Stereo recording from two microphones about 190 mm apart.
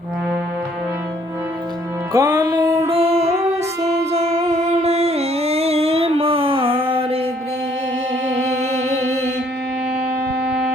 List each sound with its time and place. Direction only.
2.1 s music: 20° right (ahead or behind)